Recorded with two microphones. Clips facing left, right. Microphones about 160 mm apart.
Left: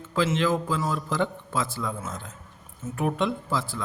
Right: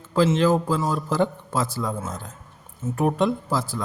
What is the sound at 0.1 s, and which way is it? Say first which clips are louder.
A man's voice: right 5 dB; 40° right (ahead or behind).